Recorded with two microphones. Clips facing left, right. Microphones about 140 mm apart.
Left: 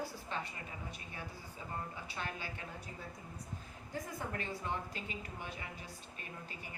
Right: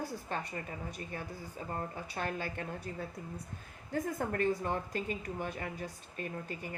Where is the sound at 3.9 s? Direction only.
50° right (ahead or behind).